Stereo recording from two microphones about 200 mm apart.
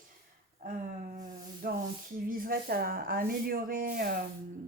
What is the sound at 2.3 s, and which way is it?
Speech, 45° right (ahead or behind).